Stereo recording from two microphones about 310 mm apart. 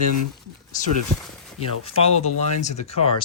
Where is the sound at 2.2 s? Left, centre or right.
Left.